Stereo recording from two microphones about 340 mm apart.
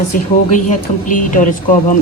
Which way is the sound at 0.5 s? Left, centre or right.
Left.